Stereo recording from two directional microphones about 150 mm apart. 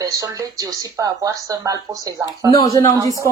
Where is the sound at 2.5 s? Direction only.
20° left (ahead or behind).